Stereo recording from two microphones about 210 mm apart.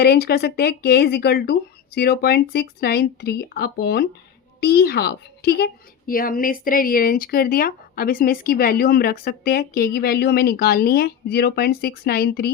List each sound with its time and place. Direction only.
0.0 s a woman's voice: 50° left (ahead or behind)